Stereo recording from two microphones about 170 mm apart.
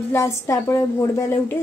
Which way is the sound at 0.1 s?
15° left (ahead or behind).